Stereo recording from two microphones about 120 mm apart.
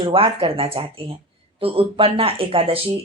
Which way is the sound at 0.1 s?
50° right (ahead or behind).